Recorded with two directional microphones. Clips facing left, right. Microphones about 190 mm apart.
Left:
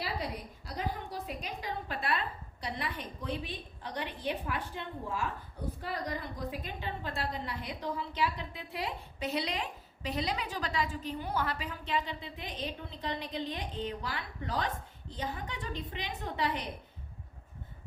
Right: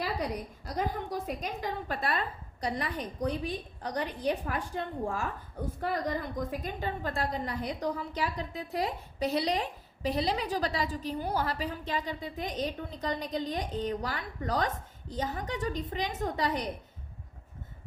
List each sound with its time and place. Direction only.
0.0 s a woman's voice: 45° right (ahead or behind)
6.5 s a woman's voice: 45° right (ahead or behind)